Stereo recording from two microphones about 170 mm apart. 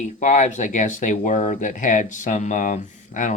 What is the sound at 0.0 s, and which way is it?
Speech, 45° left (ahead or behind).